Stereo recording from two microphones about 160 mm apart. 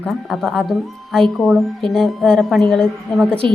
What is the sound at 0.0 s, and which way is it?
A woman's voice, centre (ahead or behind).